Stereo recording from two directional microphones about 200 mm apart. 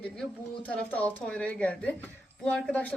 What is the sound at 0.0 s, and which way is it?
A woman's voice, 5° left (ahead or behind).